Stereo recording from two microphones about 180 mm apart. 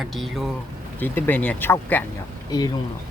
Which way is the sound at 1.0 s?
10° left (ahead or behind).